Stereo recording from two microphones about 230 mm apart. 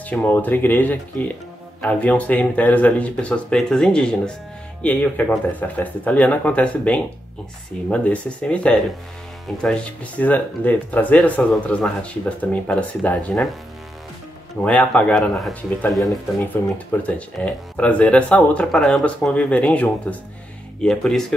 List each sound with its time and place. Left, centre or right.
0.1 s speech: centre
14.6 s speech: centre